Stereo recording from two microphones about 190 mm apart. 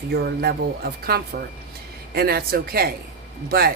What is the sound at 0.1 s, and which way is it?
Speech, 55° right (ahead or behind).